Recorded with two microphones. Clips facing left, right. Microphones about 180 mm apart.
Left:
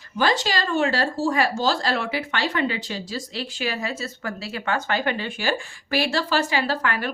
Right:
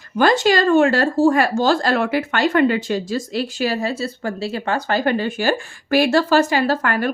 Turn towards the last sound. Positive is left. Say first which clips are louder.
# right 6 dB
turn(degrees=-45)  # may be behind; listen again after turning